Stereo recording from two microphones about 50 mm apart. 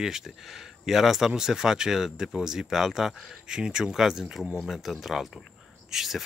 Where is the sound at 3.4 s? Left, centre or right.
Centre.